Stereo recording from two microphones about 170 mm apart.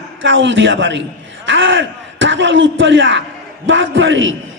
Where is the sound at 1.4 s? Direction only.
90° right.